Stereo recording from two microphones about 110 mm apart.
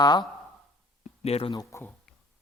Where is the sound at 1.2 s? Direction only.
70° left (ahead or behind).